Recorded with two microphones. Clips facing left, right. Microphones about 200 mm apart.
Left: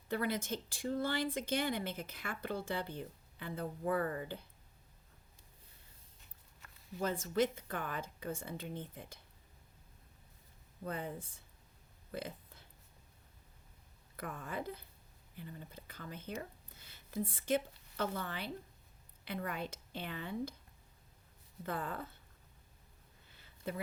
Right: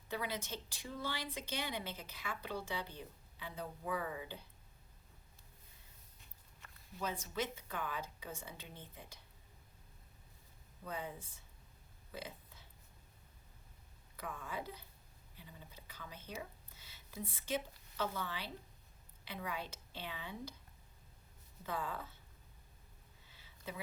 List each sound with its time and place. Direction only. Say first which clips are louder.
0.1 s speech: left 6 dB; 50° left (ahead or behind)
7.0 s speech: left 7 dB; 50° left (ahead or behind)
10.8 s speech: left 3 dB; 55° left (ahead or behind)
12.1 s a sound: left 5 dB; 55° left (ahead or behind)
14.2 s a woman's voice: left 3 dB; 55° left (ahead or behind)
21.7 s speech: left 2 dB; 55° left (ahead or behind)
23.3 s a sound: left 6 dB; 55° left (ahead or behind)